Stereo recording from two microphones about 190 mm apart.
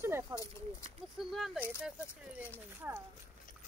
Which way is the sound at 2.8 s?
10° right (ahead or behind).